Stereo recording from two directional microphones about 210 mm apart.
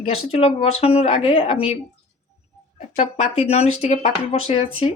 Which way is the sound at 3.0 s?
30° left (ahead or behind).